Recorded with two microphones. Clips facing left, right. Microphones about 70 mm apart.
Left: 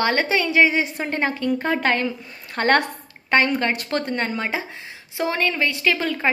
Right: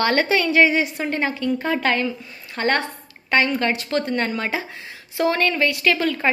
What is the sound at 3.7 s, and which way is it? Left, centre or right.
Speech, left.